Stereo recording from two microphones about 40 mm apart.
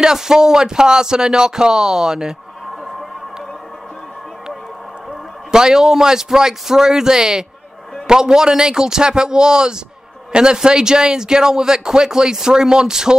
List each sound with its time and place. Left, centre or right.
0.0 s a man's voice: centre
5.5 s a man's voice: centre